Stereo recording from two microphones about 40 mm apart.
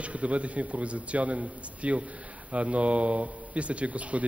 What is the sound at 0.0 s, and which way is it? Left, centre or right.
A man's voice, right.